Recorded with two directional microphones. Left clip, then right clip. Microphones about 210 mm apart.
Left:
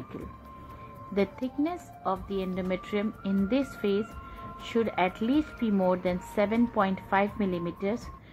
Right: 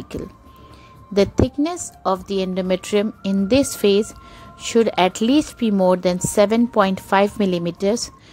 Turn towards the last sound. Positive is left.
turn(degrees=-50)  # may be behind; listen again after turning